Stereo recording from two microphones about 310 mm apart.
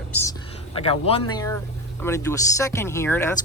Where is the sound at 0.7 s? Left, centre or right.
Centre.